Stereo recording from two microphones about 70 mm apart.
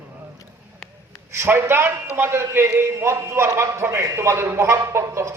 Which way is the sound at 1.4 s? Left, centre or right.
Right.